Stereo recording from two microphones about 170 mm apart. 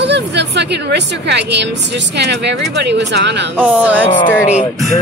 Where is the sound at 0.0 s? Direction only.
90° right.